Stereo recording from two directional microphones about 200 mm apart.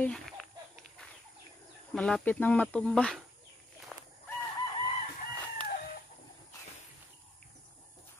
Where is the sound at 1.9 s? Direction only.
5° left (ahead or behind).